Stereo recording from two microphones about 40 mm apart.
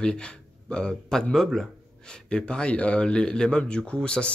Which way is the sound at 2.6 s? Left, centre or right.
Left.